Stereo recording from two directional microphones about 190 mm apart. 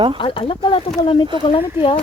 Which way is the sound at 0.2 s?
25° left (ahead or behind).